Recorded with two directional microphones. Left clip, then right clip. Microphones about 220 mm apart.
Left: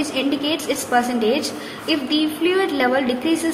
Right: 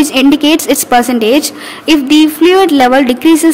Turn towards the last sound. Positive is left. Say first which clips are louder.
# right 12 dB
turn(degrees=-50)  # may be behind; listen again after turning